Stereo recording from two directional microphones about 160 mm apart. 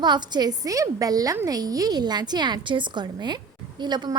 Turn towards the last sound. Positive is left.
turn(degrees=-25)  # may be behind; listen again after turning